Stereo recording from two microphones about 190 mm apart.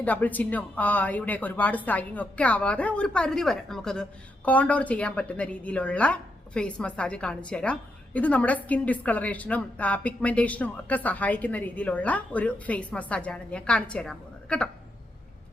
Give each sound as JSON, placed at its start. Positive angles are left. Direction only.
{"t": 0.0, "sound": "a woman's voice", "side_deg": 10}